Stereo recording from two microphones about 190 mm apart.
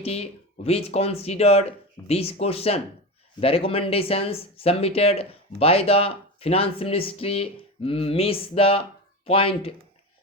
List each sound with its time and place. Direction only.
0.0 s speech: 35° left (ahead or behind)